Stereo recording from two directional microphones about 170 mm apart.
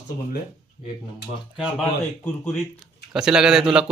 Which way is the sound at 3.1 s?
5° right (ahead or behind).